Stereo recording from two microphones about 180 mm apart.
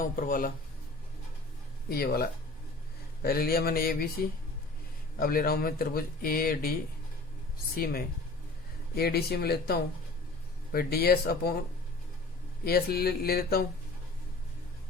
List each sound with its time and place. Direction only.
0.0 s speech: 50° left (ahead or behind)
1.9 s speech: 60° left (ahead or behind)
9.0 s speech: 60° left (ahead or behind)
12.6 s speech: 60° left (ahead or behind)